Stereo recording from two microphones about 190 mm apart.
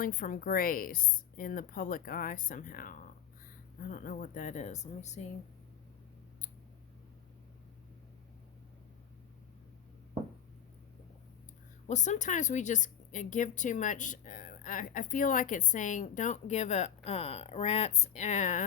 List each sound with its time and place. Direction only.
0.0 s a woman's voice: 45° left (ahead or behind)
11.9 s a woman's voice: 40° left (ahead or behind)